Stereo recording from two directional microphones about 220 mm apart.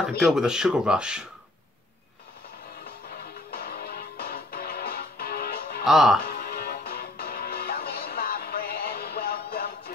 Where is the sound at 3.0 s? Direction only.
45° left (ahead or behind).